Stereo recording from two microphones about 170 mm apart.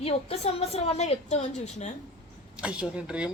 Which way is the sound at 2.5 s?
5° right (ahead or behind).